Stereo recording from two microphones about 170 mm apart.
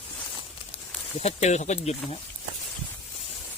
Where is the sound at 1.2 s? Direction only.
40° left (ahead or behind).